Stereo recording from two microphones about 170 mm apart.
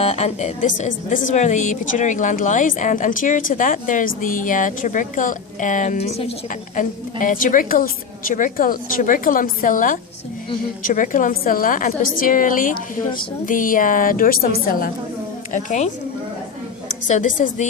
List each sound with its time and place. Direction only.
0.0 s a woman's voice: 40° left (ahead or behind)
6.7 s a woman's voice: 50° left (ahead or behind)
17.1 s a woman's voice: 50° left (ahead or behind)